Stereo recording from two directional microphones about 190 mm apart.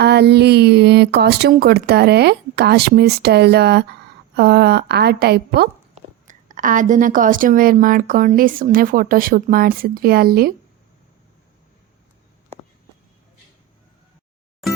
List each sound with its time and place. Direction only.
0.0 s speech: 60° right (ahead or behind)
6.2 s a woman's voice: 45° right (ahead or behind)
14.6 s music: centre (ahead or behind)